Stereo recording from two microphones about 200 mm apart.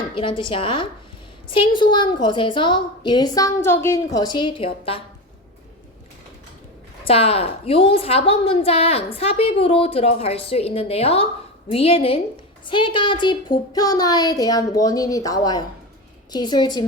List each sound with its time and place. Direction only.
0.1 s a woman's voice: 25° left (ahead or behind)
7.0 s a woman's voice: 30° left (ahead or behind)